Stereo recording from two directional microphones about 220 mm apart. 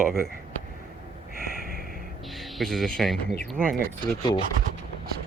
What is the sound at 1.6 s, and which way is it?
Snort, 40° right (ahead or behind).